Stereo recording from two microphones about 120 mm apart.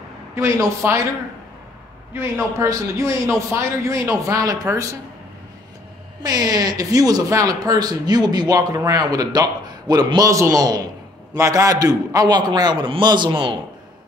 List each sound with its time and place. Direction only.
0.4 s a man's voice: 25° right (ahead or behind)
2.5 s a man's voice: 25° right (ahead or behind)
6.2 s speech: 30° right (ahead or behind)